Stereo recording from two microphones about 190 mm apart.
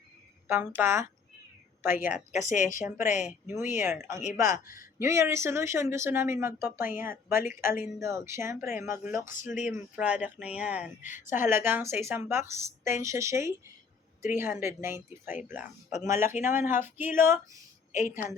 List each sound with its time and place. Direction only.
0.4 s speech: 15° right (ahead or behind)
2.3 s speech: 40° left (ahead or behind)
3.4 s speech: 10° right (ahead or behind)
4.5 s speech: 45° left (ahead or behind)
4.9 s speech: 15° right (ahead or behind)
9.3 s speech: 45° left (ahead or behind)
9.6 s speech: 10° right (ahead or behind)
11.0 s speech: 40° left (ahead or behind)
11.3 s speech: 10° right (ahead or behind)
15.9 s speech: 40° left (ahead or behind)
16.4 s speech: 10° right (ahead or behind)